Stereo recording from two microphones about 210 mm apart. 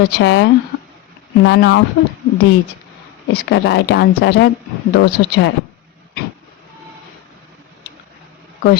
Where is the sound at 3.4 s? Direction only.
55° left (ahead or behind).